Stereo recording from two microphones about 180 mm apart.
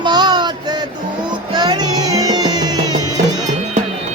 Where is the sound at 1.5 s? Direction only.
20° right (ahead or behind).